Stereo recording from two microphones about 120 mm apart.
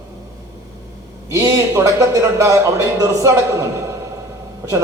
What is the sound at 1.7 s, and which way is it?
A man's voice, 25° right (ahead or behind).